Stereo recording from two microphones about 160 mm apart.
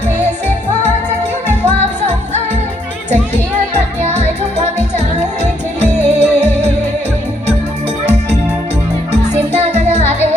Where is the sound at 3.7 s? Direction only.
45° right (ahead or behind).